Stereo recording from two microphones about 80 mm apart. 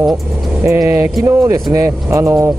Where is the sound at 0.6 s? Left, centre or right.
Right.